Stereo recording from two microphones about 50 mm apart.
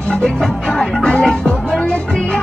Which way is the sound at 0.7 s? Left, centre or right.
Centre.